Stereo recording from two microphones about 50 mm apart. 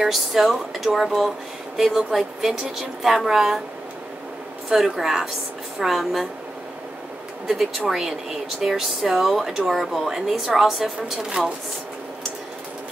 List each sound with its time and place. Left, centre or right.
0.0 s speech: centre
4.6 s speech: centre
7.4 s speech: centre